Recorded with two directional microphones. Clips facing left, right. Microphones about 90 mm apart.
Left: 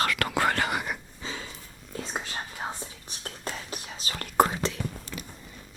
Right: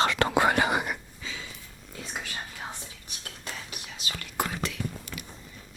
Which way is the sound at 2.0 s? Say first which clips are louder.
Left 1 dB; 30° left (ahead or behind).